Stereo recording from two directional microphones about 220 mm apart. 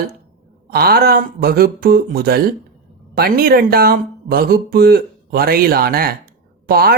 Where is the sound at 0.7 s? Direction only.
45° right (ahead or behind).